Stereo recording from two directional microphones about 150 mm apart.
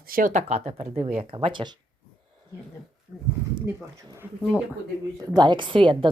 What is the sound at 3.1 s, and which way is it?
Speech, 15° right (ahead or behind).